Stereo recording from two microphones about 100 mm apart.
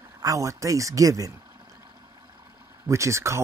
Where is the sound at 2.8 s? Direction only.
30° right (ahead or behind).